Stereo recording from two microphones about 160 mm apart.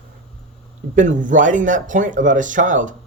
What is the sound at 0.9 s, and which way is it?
Speech, 50° right (ahead or behind).